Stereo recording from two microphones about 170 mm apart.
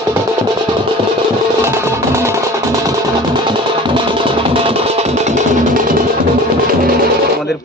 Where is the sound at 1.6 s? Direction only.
15° right (ahead or behind).